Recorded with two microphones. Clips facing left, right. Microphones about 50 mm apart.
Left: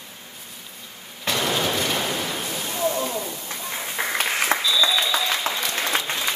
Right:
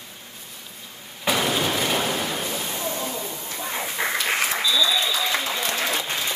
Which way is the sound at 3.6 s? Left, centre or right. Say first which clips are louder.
Right 2 dB; centre.